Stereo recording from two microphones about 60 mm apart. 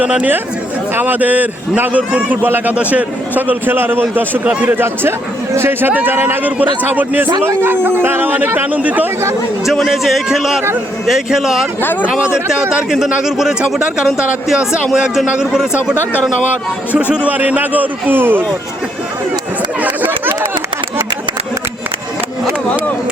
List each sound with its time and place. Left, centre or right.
0.0 s a man's voice: centre
0.9 s a man's voice: right
5.9 s a man's voice: right
7.4 s a man's voice: right
9.8 s a man's voice: centre
11.8 s speech: left
13.2 s speech: centre
16.9 s a man's voice: right
19.8 s a sound: right